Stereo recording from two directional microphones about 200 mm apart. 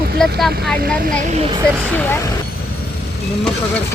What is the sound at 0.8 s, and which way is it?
Speech, 45° right (ahead or behind).